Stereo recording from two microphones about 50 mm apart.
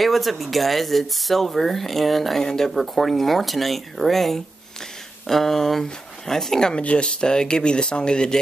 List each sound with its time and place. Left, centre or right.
0.0 s speech: centre